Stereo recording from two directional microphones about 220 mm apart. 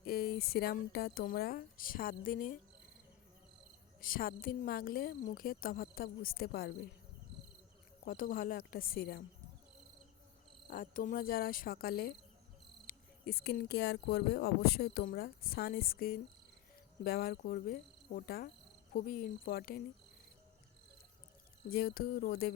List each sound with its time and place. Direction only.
0.0 s speech: 45° left (ahead or behind)
4.0 s a woman's voice: 40° left (ahead or behind)
8.0 s a woman's voice: 40° left (ahead or behind)
10.7 s a woman's voice: 40° left (ahead or behind)
21.7 s speech: 45° left (ahead or behind)